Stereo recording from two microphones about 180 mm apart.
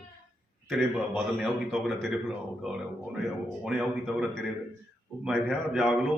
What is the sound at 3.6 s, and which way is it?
A man's voice, centre (ahead or behind).